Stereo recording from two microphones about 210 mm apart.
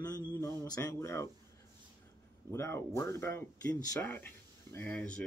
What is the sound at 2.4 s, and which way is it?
Speech, 15° left (ahead or behind).